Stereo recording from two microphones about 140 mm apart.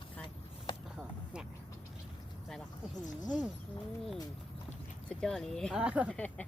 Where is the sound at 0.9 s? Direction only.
5° right (ahead or behind).